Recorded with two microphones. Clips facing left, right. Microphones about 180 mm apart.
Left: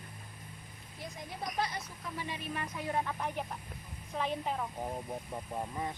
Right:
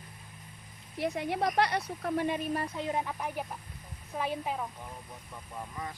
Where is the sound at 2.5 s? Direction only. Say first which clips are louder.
Right 3 dB; 30° right (ahead or behind); by 4.6 s 5° right (ahead or behind).